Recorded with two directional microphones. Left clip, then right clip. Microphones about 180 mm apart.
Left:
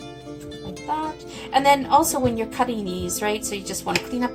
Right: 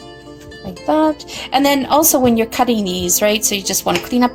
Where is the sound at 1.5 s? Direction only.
55° right (ahead or behind).